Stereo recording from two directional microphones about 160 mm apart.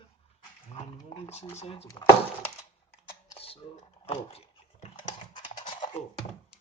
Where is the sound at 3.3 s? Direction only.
35° left (ahead or behind).